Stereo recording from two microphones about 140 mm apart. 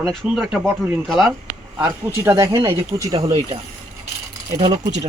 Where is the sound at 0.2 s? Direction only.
5° right (ahead or behind).